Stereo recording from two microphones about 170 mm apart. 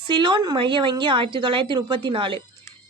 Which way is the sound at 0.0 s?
30° right (ahead or behind).